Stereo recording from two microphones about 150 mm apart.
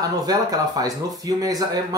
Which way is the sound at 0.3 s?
25° right (ahead or behind).